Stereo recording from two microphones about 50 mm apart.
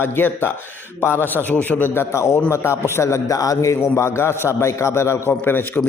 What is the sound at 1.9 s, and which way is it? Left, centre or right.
A man's voice, left.